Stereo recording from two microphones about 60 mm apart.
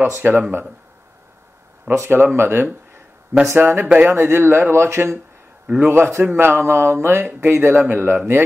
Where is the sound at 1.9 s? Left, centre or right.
Right.